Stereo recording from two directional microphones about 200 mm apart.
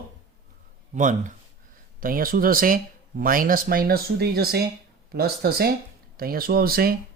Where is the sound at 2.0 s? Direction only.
45° right (ahead or behind).